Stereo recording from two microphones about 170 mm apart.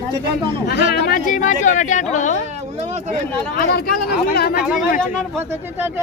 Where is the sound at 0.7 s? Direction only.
65° left (ahead or behind); by 2.4 s 45° left (ahead or behind).